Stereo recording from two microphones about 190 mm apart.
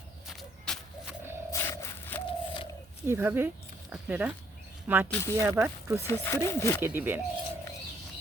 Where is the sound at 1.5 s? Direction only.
15° left (ahead or behind).